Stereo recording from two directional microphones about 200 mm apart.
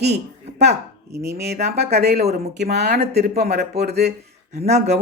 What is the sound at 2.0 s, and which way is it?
Speech, 55° right (ahead or behind).